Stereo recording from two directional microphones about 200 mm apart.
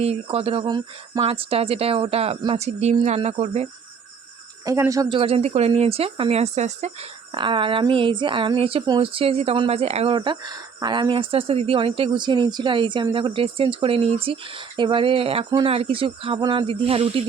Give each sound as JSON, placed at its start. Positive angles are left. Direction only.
{"t": 0.0, "sound": "speech", "side_deg": -30}
{"t": 4.6, "sound": "speech", "side_deg": -15}